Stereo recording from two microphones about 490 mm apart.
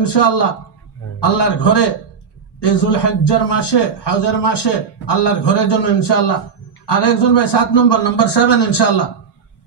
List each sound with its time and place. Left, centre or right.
0.0 s a man's voice: left